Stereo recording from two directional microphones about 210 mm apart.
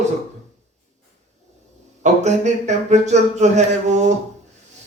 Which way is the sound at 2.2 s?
35° right (ahead or behind).